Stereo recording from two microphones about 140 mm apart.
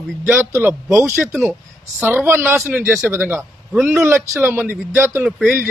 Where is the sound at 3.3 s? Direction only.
Centre (ahead or behind).